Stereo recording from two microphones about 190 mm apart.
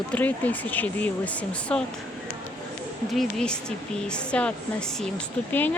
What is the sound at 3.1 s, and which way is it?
Speech, centre (ahead or behind).